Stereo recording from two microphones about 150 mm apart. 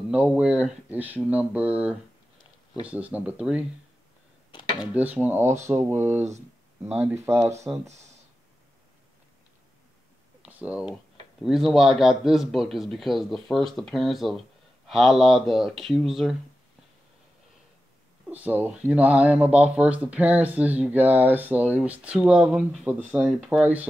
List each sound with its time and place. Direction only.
0.1 s speech: 5° right (ahead or behind)
4.9 s speech: 10° right (ahead or behind)
10.4 s speech: 10° right (ahead or behind)
18.3 s speech: 10° right (ahead or behind)